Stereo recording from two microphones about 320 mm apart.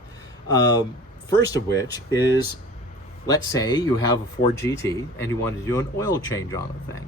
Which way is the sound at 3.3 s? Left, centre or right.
Centre.